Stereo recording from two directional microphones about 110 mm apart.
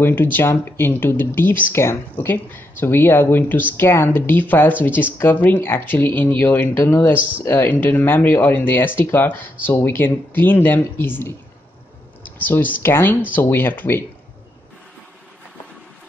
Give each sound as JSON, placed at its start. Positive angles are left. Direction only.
{"t": 0.0, "sound": "speech", "side_deg": 20}